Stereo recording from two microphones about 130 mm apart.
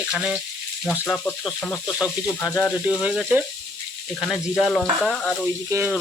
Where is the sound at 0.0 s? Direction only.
5° right (ahead or behind).